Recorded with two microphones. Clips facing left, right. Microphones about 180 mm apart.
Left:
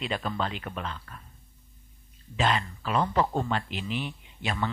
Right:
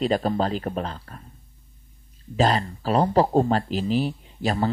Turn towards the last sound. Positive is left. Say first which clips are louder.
# right 7 dB
turn(degrees=-35)  # may be behind; listen again after turning